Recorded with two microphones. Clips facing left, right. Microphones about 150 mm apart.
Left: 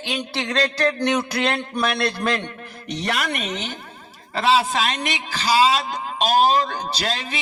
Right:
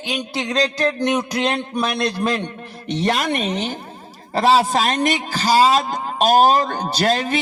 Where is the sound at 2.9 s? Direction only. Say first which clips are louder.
Right 5 dB; 30° right (ahead or behind).